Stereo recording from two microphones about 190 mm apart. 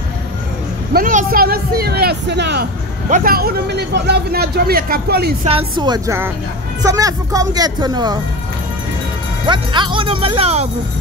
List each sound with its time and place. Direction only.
0.9 s speech: 50° right (ahead or behind)
3.1 s a man's voice: 45° right (ahead or behind)
5.4 s speech: 30° right (ahead or behind)
9.5 s speech: 25° right (ahead or behind)